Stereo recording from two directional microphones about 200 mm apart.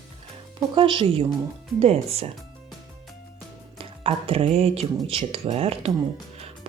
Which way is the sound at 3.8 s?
30° right (ahead or behind).